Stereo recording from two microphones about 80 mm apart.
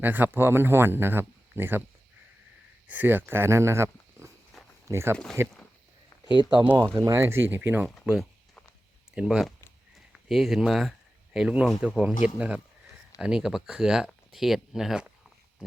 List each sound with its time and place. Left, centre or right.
0.0 s speech: right
2.8 s speech: right
4.5 s a sound: centre
4.9 s speech: right
5.1 s speech: centre
6.2 s speech: left
7.0 s speech: right
8.0 s speech: centre